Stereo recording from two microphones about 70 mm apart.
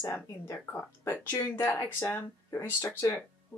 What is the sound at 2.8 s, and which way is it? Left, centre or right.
Speech, left.